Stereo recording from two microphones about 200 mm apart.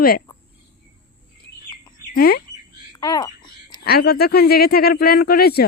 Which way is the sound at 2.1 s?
50° left (ahead or behind).